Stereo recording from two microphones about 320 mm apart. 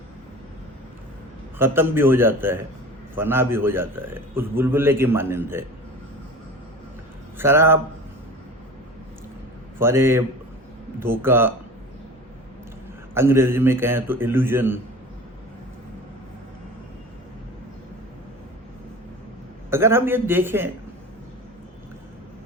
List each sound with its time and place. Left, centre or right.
1.5 s a man's voice: centre
7.3 s a man's voice: centre
9.7 s a man's voice: centre
13.1 s a man's voice: centre
19.7 s a man's voice: centre